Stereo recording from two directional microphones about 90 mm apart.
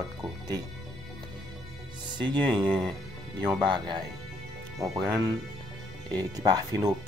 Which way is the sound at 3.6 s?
60° right (ahead or behind).